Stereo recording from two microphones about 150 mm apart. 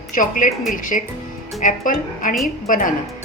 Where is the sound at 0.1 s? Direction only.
60° left (ahead or behind).